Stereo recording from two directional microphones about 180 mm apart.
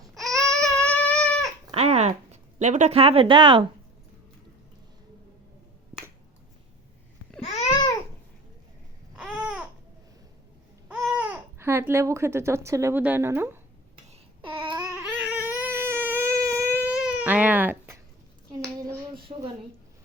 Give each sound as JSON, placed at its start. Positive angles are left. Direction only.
{"t": 0.1, "sound": "baby cry", "side_deg": 0}
{"t": 1.7, "sound": "a woman's voice", "side_deg": -35}
{"t": 9.1, "sound": "babbling", "side_deg": -5}
{"t": 10.8, "sound": "speech", "side_deg": -10}
{"t": 14.1, "sound": "babbling", "side_deg": -30}
{"t": 14.9, "sound": "baby cry", "side_deg": -5}
{"t": 19.3, "sound": "a woman's voice", "side_deg": -35}